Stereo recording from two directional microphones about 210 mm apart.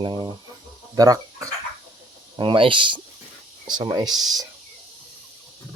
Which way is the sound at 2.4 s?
25° right (ahead or behind).